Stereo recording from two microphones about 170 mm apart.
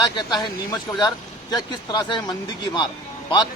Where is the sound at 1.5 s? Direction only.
25° left (ahead or behind).